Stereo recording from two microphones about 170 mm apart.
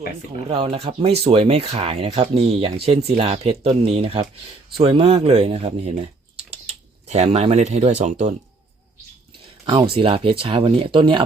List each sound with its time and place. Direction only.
0.5 s speech: 35° right (ahead or behind)
9.9 s speech: 35° right (ahead or behind)